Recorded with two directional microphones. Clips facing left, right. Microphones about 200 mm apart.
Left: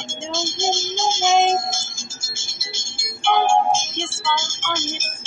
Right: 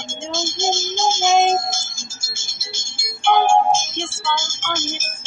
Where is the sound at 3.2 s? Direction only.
45° right (ahead or behind).